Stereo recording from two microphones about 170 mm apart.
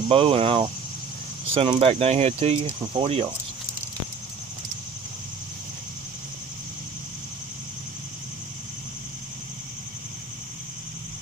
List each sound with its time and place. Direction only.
0.1 s speech: 35° right (ahead or behind)